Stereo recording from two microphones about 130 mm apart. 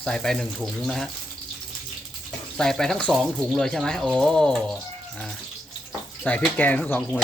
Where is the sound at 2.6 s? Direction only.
5° left (ahead or behind).